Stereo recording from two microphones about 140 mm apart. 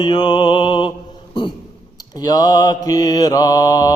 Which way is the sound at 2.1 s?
25° left (ahead or behind).